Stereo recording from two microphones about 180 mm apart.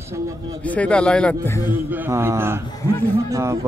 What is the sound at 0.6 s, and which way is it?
Speech, 10° left (ahead or behind).